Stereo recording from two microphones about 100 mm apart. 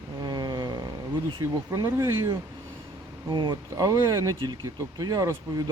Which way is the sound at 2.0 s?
35° right (ahead or behind).